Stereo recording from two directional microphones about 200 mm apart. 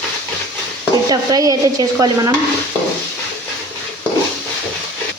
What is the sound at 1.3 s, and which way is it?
Stir, 15° right (ahead or behind).